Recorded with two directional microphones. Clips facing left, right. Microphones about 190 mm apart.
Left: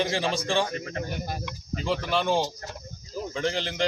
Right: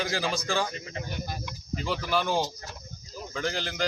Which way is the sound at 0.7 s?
55° left (ahead or behind).